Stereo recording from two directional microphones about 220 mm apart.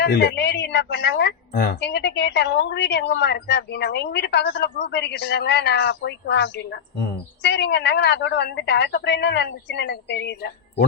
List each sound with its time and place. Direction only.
0.0 s a woman's voice: 45° left (ahead or behind)